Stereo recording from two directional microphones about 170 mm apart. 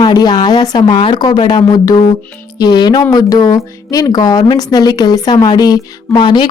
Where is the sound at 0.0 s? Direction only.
25° left (ahead or behind).